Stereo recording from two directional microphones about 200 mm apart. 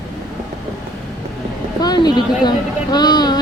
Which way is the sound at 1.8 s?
20° left (ahead or behind).